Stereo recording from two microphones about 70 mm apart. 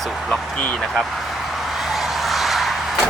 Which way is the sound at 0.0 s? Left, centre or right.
Centre.